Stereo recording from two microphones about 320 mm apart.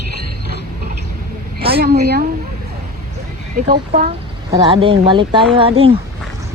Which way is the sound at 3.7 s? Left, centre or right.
Right.